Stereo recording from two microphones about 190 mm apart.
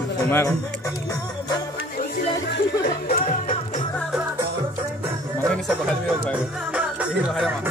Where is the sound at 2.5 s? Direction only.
60° left (ahead or behind).